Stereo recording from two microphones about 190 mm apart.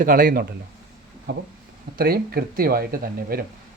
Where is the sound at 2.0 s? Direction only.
50° right (ahead or behind).